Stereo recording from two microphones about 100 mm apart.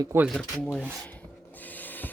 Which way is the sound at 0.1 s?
25° right (ahead or behind).